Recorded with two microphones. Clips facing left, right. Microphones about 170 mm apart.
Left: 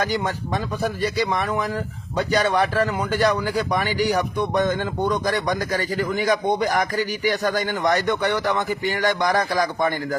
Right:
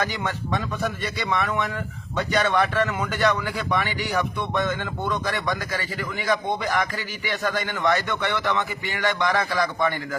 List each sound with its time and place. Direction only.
0.0 s speech: 35° left (ahead or behind)